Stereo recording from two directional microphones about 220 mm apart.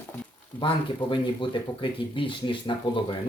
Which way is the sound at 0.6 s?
20° left (ahead or behind).